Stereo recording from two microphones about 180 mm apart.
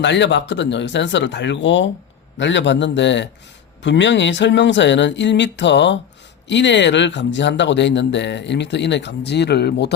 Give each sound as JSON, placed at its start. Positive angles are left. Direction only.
{"t": 0.0, "sound": "speech", "side_deg": 75}